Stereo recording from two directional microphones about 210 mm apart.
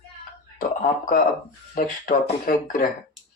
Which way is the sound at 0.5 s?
40° left (ahead or behind).